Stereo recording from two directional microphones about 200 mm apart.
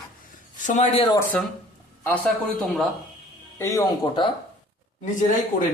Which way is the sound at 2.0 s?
5° left (ahead or behind).